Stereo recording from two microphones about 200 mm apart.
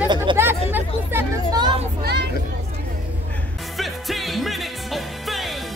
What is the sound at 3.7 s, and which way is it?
Music, centre (ahead or behind).